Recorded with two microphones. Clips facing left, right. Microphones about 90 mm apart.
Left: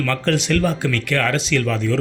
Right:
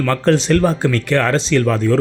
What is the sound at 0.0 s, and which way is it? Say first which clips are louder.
A man's voice: right 5 dB; 35° right (ahead or behind).